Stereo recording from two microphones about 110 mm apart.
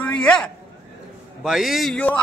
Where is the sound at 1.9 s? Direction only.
15° left (ahead or behind).